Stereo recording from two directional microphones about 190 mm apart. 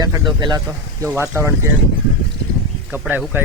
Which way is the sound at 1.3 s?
15° right (ahead or behind).